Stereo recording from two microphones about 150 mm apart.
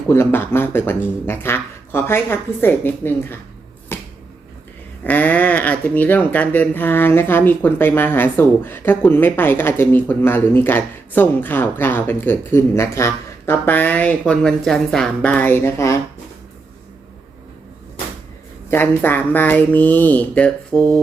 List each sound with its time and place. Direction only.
0.1 s speech: 15° left (ahead or behind)
3.9 s finger snapping: 15° left (ahead or behind)
5.0 s speech: 10° left (ahead or behind)
18.7 s speech: 15° left (ahead or behind)